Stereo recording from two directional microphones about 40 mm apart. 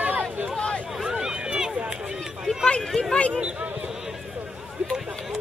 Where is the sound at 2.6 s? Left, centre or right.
Centre.